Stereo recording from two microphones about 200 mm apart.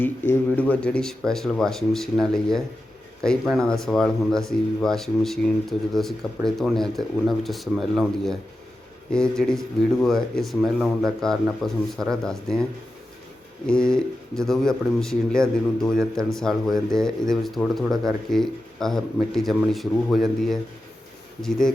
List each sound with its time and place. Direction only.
0.0 s speech: 10° left (ahead or behind)
13.7 s speech: 5° left (ahead or behind)